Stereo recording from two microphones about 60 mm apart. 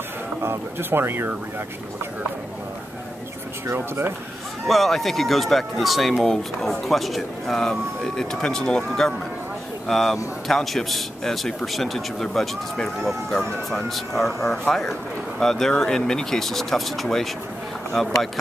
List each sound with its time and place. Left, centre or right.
0.4 s speech: right
3.6 s speech: right
4.6 s a man's voice: centre